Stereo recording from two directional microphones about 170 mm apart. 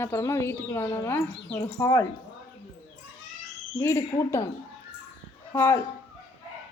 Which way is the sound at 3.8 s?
15° left (ahead or behind).